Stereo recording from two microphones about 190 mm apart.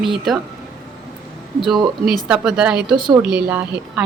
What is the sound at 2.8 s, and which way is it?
Speech, 25° right (ahead or behind).